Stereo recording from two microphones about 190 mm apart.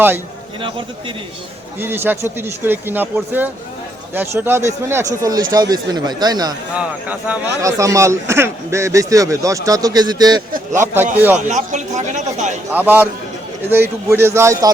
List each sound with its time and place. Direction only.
0.6 s speech: 25° right (ahead or behind)
1.8 s speech: 10° right (ahead or behind)
6.7 s speech: 10° right (ahead or behind)
11.4 s a man's voice: 40° right (ahead or behind)
12.7 s speech: 10° right (ahead or behind)